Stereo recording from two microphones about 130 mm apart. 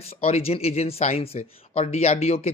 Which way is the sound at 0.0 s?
50° left (ahead or behind).